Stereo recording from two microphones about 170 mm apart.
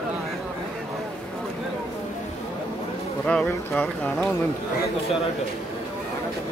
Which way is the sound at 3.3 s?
5° left (ahead or behind).